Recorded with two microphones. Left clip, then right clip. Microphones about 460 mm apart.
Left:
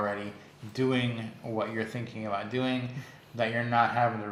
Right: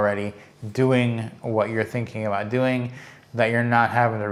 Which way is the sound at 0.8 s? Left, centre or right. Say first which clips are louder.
Right 8 dB; right.